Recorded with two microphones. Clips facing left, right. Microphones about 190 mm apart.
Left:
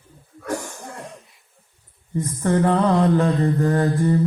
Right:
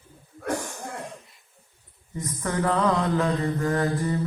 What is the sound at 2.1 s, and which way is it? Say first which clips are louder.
Speech: left 7 dB; 30° left (ahead or behind).